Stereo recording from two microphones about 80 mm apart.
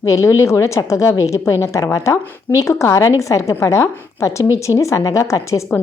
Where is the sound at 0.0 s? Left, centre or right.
Left.